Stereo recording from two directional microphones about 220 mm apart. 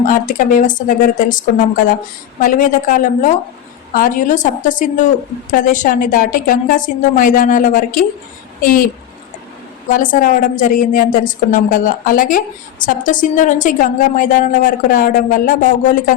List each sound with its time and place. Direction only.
0.0 s a woman's voice: 35° left (ahead or behind)
9.9 s a woman's voice: 35° left (ahead or behind)